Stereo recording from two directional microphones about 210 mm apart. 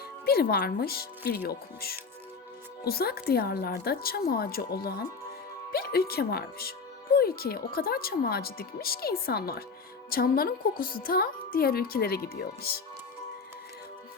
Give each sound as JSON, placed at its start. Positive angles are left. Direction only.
{"t": 0.3, "sound": "speech", "side_deg": 50}